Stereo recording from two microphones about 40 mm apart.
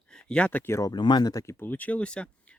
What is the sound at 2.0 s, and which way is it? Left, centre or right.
Speech, left.